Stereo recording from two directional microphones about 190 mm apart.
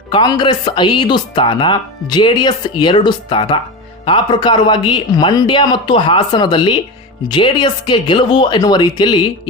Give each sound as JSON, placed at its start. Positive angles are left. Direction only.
{"t": 0.1, "sound": "speech", "side_deg": 25}